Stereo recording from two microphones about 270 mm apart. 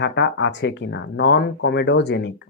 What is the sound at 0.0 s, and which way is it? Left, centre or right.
Speech, left.